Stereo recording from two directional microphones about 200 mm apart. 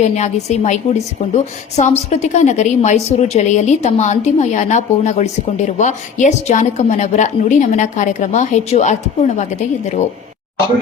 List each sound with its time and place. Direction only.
0.0 s a woman's voice: 35° left (ahead or behind)